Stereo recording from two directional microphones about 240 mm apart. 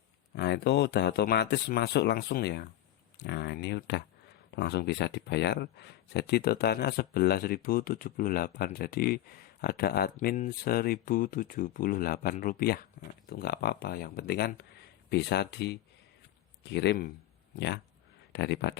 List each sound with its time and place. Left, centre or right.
0.3 s speech: left
18.3 s speech: left